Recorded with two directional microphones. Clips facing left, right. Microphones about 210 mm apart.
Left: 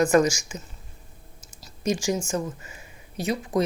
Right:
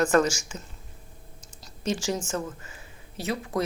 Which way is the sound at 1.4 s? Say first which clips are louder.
Left 4 dB; 10° left (ahead or behind).